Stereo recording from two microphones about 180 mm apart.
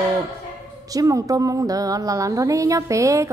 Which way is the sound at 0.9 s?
20° right (ahead or behind).